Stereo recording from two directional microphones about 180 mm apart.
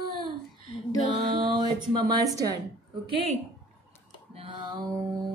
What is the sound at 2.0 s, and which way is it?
A woman's voice, 20° right (ahead or behind).